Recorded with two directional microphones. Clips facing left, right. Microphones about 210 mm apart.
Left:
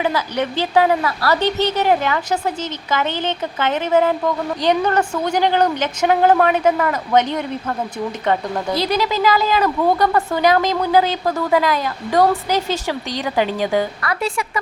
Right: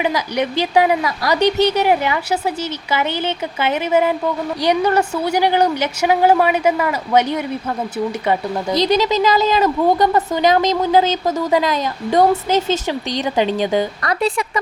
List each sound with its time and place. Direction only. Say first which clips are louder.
0.0 s a woman's voice: right 1 dB; 15° right (ahead or behind)
8.7 s a woman's voice: right 4 dB; 20° right (ahead or behind)